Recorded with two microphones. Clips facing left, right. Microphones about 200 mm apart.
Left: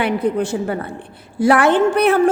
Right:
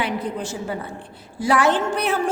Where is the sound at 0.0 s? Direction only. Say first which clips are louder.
Left 7 dB; 60° left (ahead or behind).